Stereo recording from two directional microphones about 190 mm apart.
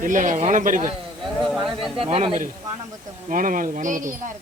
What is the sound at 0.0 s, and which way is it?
Speech, 45° right (ahead or behind).